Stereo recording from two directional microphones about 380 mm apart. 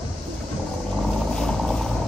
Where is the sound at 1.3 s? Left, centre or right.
Centre.